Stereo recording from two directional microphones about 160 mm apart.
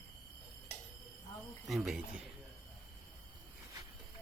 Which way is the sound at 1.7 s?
Centre (ahead or behind).